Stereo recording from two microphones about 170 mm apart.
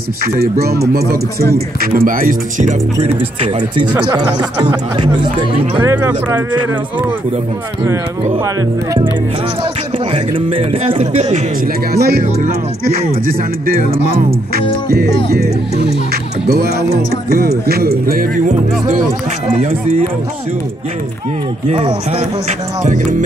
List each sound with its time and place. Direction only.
0.2 s speech: 65° right (ahead or behind)
3.3 s a man's voice: 30° right (ahead or behind)
5.8 s speech: 15° right (ahead or behind)
8.5 s speech: 20° right (ahead or behind)
10.1 s a man's voice: 35° right (ahead or behind)
11.6 s speech: 65° right (ahead or behind)
15.3 s speech: 70° right (ahead or behind); by 18.9 s 50° right (ahead or behind)
21.6 s speech: 35° right (ahead or behind)